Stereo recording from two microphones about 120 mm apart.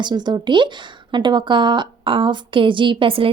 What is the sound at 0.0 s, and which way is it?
A woman's voice, 35° right (ahead or behind).